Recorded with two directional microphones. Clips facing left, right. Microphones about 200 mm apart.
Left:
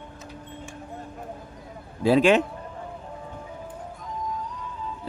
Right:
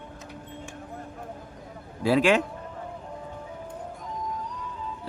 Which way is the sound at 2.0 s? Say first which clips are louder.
Left 3 dB; 20° left (ahead or behind).